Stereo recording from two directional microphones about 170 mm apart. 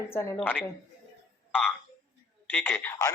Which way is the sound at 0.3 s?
5° left (ahead or behind).